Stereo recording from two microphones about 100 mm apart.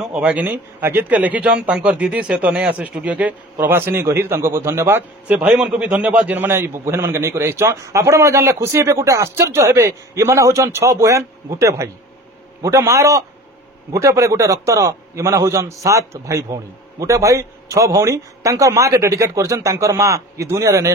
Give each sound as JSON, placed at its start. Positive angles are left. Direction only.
{"t": 0.2, "sound": "a man's voice", "side_deg": -15}
{"t": 3.5, "sound": "a man's voice", "side_deg": -25}